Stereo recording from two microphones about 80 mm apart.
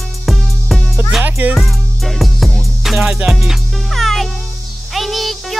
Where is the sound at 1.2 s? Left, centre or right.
Right.